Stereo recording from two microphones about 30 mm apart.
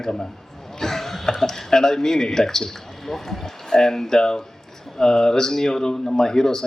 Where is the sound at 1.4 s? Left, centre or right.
Centre.